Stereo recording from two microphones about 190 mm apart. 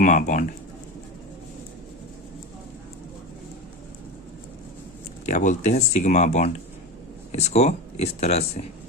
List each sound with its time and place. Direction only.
0.0 s speech: 40° left (ahead or behind)
5.2 s speech: 40° left (ahead or behind)